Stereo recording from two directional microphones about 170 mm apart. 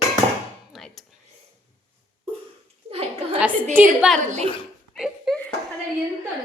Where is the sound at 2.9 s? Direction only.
35° right (ahead or behind).